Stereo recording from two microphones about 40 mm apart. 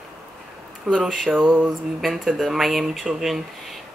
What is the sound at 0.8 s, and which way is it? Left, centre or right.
Speech, right.